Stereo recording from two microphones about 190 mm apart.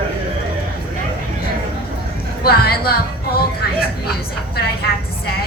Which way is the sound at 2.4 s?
55° left (ahead or behind).